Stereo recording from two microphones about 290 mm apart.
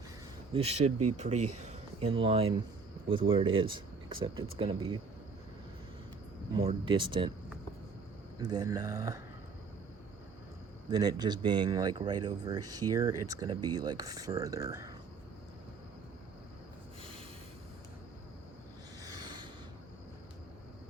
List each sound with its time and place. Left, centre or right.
0.5 s speech: right
0.9 s speech: right
1.6 s speech: right
6.6 s speech: centre
8.4 s speech: centre
10.9 s speech: centre
19.0 s rub: centre